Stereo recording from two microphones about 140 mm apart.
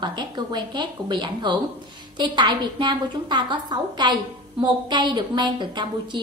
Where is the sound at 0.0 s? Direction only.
30° right (ahead or behind).